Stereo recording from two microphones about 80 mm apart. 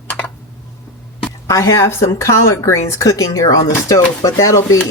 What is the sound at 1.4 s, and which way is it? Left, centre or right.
Speech, left.